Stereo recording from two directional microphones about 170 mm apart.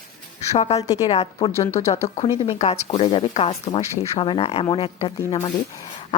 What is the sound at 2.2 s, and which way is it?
A woman's voice, 35° left (ahead or behind).